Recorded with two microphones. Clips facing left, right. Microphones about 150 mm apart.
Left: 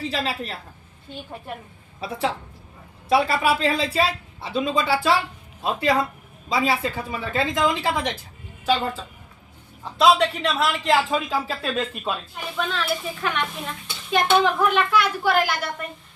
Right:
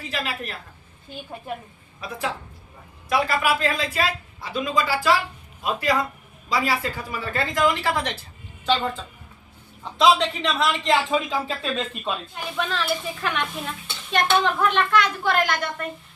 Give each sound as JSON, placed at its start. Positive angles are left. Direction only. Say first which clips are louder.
{"t": 0.0, "sound": "a woman's voice", "louder": "left 3 dB", "side_deg": 30}
{"t": 2.0, "sound": "a woman's voice", "louder": "left 3 dB", "side_deg": 30}
{"t": 10.0, "sound": "speech", "louder": "left 1 dB", "side_deg": 5}